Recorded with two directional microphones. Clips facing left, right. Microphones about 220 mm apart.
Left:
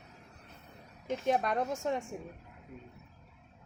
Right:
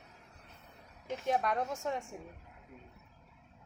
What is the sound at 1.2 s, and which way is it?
Speech, 20° left (ahead or behind).